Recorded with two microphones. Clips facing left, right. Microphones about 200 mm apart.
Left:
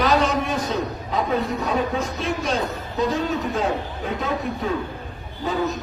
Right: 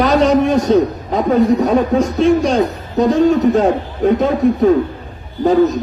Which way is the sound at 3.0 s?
45° right (ahead or behind).